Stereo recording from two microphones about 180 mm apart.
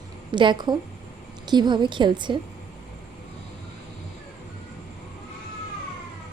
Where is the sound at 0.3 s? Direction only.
25° right (ahead or behind).